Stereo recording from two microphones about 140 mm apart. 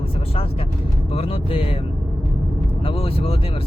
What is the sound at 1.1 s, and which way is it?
Speech, 45° left (ahead or behind).